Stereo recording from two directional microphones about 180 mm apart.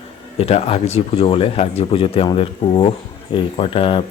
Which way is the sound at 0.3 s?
35° left (ahead or behind).